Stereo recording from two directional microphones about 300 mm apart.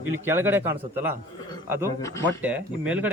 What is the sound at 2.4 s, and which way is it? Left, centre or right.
Speech, centre.